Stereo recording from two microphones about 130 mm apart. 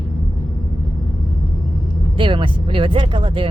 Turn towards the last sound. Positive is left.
turn(degrees=-40)  # may be behind; listen again after turning